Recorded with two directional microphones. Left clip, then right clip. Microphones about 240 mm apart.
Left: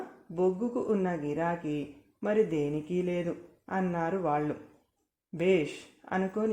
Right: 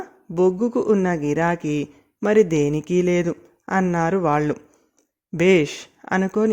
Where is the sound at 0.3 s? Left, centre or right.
Right.